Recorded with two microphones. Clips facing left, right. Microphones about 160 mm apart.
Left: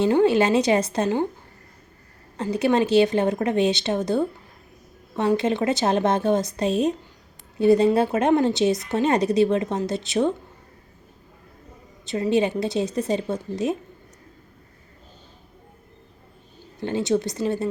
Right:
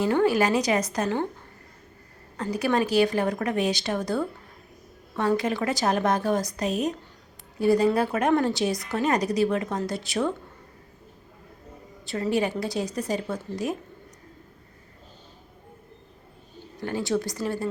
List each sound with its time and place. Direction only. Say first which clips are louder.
0.0 s a woman's voice: left 4 dB; 20° left (ahead or behind)
2.4 s a woman's voice: left 4 dB; 25° left (ahead or behind)
12.0 s a woman's voice: left 4 dB; 20° left (ahead or behind)
16.8 s a woman's voice: left 4 dB; 20° left (ahead or behind)